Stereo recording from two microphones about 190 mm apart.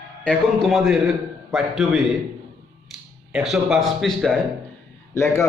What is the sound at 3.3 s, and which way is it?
A man's voice, centre (ahead or behind).